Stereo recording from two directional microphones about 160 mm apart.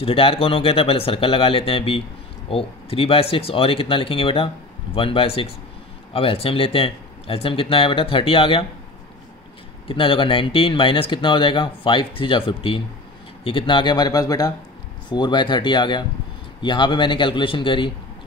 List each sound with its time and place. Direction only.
0.0 s speech: 35° left (ahead or behind)
9.8 s speech: 30° left (ahead or behind)